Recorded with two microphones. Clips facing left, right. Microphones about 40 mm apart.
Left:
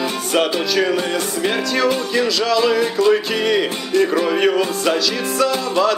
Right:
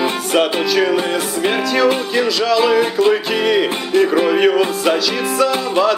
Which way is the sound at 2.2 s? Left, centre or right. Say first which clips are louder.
Right 1 dB; centre.